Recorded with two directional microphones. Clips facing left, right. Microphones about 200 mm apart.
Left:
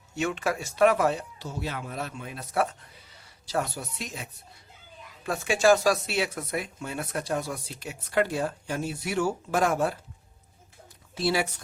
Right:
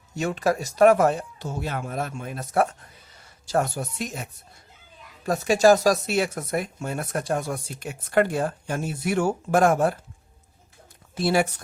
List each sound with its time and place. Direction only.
0.2 s speech: 40° right (ahead or behind)
5.2 s speech: 40° right (ahead or behind)
11.1 s speech: 50° right (ahead or behind)